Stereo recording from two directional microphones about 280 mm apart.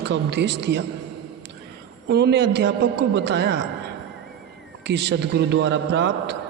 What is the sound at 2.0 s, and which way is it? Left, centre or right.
Mantra, right.